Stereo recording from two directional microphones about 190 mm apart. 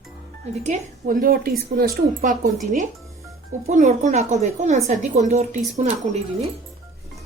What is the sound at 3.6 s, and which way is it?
Speech, 40° right (ahead or behind).